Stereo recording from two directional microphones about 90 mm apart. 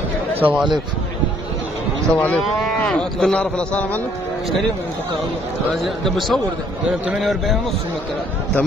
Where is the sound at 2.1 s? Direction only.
15° left (ahead or behind).